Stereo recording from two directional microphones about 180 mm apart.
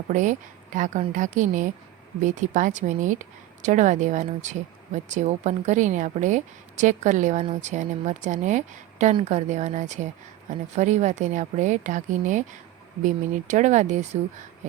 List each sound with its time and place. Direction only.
0.1 s a woman's voice: 45° right (ahead or behind)